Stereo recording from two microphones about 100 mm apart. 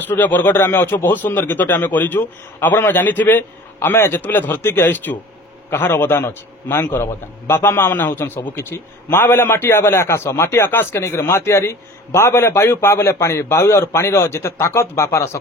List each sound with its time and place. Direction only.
0.0 s a man's voice: 20° left (ahead or behind)